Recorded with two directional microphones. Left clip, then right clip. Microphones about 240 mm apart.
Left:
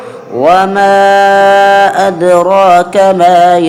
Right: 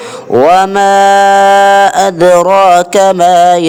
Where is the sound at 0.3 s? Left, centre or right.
Right.